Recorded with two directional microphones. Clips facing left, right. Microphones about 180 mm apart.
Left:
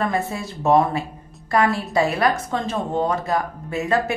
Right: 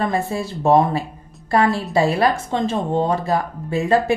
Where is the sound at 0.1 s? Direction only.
30° right (ahead or behind).